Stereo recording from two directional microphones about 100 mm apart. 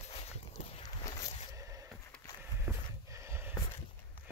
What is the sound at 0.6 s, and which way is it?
Boat, 90° left.